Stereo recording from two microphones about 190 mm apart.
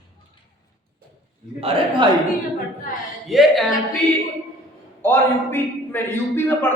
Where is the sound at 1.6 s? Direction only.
30° right (ahead or behind).